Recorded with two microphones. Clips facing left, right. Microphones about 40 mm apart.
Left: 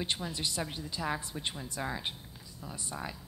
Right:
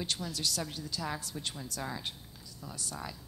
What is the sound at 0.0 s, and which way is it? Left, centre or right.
A woman's voice, left.